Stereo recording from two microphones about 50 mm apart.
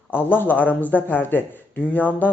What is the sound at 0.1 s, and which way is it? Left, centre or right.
Speech, left.